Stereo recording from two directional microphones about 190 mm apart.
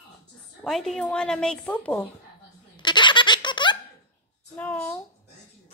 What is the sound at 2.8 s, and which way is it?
Laughter, 25° left (ahead or behind).